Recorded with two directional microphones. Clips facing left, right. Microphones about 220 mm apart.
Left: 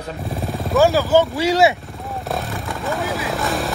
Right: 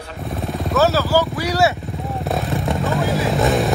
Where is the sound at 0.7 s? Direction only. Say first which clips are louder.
Left 2 dB; 15° left (ahead or behind).